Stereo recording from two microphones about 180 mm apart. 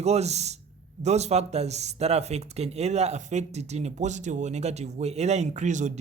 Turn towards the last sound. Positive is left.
turn(degrees=-40)  # may be behind; listen again after turning